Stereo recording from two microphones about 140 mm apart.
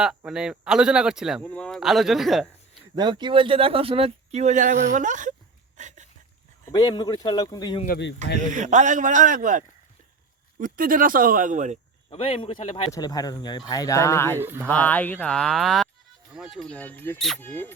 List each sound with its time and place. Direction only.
0.3 s speech: 5° right (ahead or behind)
1.5 s speech: 10° left (ahead or behind)
2.9 s speech: 30° right (ahead or behind); by 5.3 s 65° right (ahead or behind)
5.7 s a sound: 60° right (ahead or behind)
6.7 s speech: 30° left (ahead or behind)
8.5 s a man's voice: 60° right (ahead or behind)
10.6 s speech: 80° right; by 11.8 s 60° right (ahead or behind)
12.1 s a man's voice: 40° left (ahead or behind)
12.9 s speech: 25° left (ahead or behind)
14.3 s speech: 15° right (ahead or behind)
14.7 s speech: 10° left (ahead or behind)
17.2 s speech: centre (ahead or behind)
17.4 s speech: 15° left (ahead or behind)